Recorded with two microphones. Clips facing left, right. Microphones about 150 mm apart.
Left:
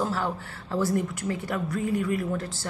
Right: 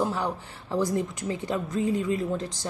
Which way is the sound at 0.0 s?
15° right (ahead or behind).